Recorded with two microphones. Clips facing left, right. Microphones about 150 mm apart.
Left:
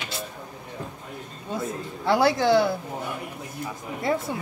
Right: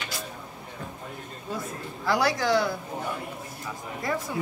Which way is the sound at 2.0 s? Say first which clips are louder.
Left 4 dB; 25° left (ahead or behind).